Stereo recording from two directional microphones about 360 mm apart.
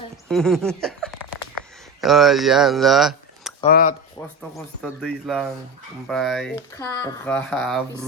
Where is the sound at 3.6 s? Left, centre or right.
Left.